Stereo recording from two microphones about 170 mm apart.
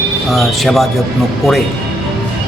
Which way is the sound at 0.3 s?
Centre (ahead or behind).